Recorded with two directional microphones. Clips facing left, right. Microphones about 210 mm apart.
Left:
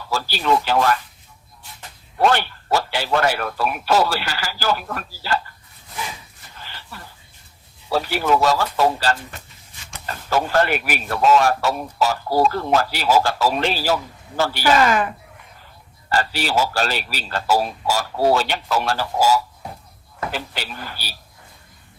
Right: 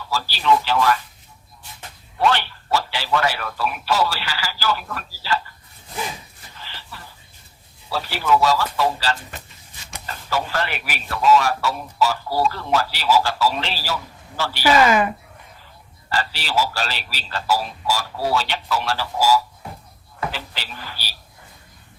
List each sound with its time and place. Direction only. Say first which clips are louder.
0.1 s a man's voice: even; 50° left (ahead or behind)
2.1 s a man's voice: left 2 dB; 45° left (ahead or behind)
7.9 s a man's voice: left 2 dB; 50° left (ahead or behind)
10.2 s a man's voice: left 6 dB; 50° left (ahead or behind)
14.6 s speech: right 2 dB; 10° right (ahead or behind)
16.0 s a man's voice: left 4 dB; 45° left (ahead or behind)